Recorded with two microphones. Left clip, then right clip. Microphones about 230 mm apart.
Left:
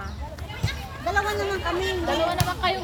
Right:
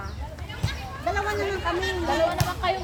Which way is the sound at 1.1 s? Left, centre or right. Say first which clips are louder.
Left 2 dB; left.